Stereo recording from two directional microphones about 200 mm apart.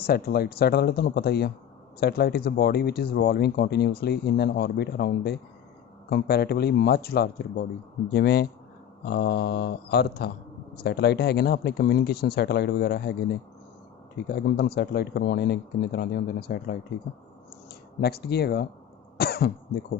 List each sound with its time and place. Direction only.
0.0 s speech: 50° left (ahead or behind)